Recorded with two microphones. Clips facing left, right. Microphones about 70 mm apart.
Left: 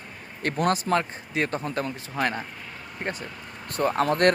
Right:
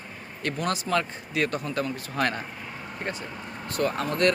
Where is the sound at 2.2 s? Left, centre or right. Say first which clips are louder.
Even; centre.